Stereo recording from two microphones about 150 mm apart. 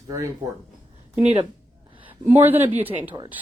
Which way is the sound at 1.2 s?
45° right (ahead or behind).